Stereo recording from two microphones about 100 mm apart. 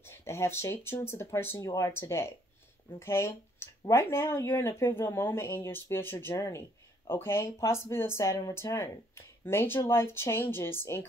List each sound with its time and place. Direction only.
0.0 s speech: 25° left (ahead or behind)